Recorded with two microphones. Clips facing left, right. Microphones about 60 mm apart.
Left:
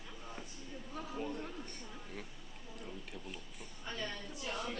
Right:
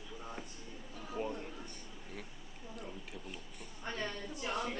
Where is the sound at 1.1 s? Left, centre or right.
Centre.